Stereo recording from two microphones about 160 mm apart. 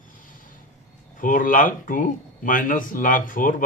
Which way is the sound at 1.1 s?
55° left (ahead or behind).